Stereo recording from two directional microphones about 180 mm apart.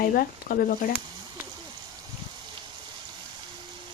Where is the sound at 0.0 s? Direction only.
55° left (ahead or behind).